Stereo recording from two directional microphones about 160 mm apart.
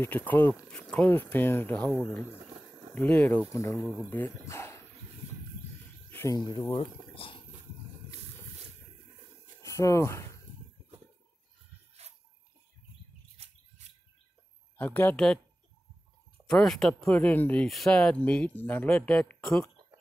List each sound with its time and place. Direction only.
0.0 s speech: 10° left (ahead or behind)
1.9 s speech: centre (ahead or behind)
2.9 s speech: 10° left (ahead or behind)
6.0 s a sound: 15° left (ahead or behind)
6.3 s speech: 25° left (ahead or behind)
9.6 s a sound: 20° left (ahead or behind)
14.8 s speech: 10° left (ahead or behind)
16.4 s speech: centre (ahead or behind)